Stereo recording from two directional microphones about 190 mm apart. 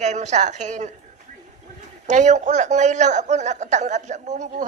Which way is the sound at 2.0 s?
40° right (ahead or behind).